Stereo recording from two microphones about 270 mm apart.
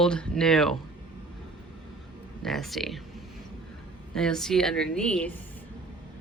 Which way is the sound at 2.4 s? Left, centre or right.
Centre.